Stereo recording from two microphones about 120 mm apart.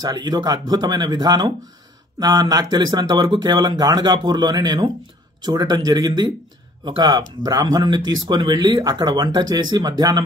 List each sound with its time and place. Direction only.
0.0 s speech: 30° right (ahead or behind)